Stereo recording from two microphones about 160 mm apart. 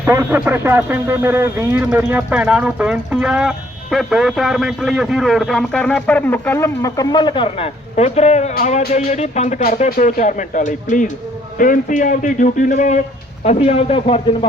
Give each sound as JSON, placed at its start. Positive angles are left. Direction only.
{"t": 0.0, "sound": "a man's voice", "side_deg": -15}